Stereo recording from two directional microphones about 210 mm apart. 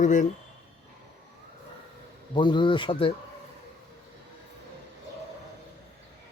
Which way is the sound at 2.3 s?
25° left (ahead or behind).